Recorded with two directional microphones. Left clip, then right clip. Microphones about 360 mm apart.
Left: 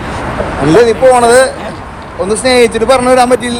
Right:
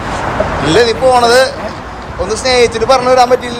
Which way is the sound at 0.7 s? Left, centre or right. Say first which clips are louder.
Left 3 dB; centre.